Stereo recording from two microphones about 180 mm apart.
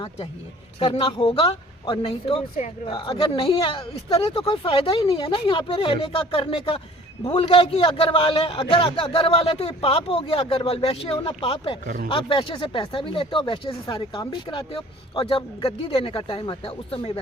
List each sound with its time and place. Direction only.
0.8 s a man's voice: 35° left (ahead or behind)